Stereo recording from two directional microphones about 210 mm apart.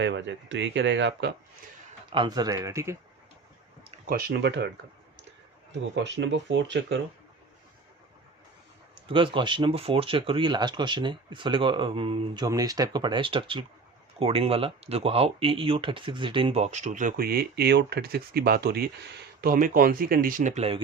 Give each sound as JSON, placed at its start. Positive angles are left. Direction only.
{"t": 0.0, "sound": "speech", "side_deg": -60}
{"t": 2.1, "sound": "speech", "side_deg": -20}
{"t": 4.1, "sound": "speech", "side_deg": -50}
{"t": 5.9, "sound": "speech", "side_deg": -55}
{"t": 9.0, "sound": "speech", "side_deg": -25}